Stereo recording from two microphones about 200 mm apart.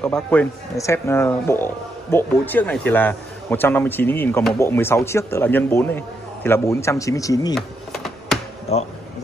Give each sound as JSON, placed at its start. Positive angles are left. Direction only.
{"t": 0.0, "sound": "speech", "side_deg": 5}
{"t": 7.5, "sound": "a sound", "side_deg": 0}
{"t": 8.7, "sound": "speech", "side_deg": 30}